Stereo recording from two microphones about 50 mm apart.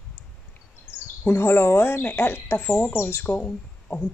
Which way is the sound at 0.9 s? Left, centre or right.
Left.